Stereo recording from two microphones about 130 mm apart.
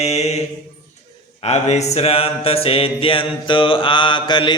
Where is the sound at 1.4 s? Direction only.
60° left (ahead or behind); by 4.5 s 35° left (ahead or behind).